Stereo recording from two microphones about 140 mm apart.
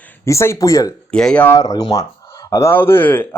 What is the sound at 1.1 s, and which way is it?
Speech, 5° left (ahead or behind).